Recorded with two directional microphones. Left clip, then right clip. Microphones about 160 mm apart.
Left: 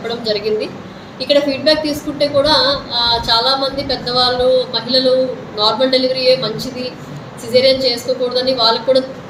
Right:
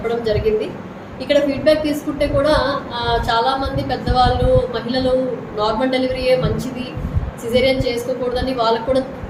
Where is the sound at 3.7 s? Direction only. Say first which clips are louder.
Left 1 dB; 35° right (ahead or behind).